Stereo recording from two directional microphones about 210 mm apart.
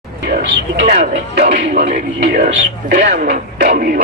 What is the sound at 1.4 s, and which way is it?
A man's voice, 30° right (ahead or behind).